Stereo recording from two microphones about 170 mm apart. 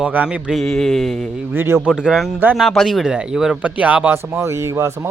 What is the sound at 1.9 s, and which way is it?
Speech, 5° right (ahead or behind).